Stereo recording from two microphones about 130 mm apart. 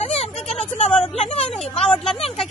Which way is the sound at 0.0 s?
50° left (ahead or behind).